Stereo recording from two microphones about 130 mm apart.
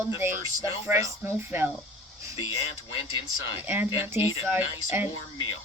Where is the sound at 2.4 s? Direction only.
45° left (ahead or behind).